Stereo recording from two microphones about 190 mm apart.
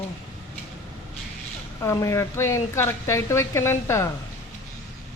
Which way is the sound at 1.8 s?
15° left (ahead or behind).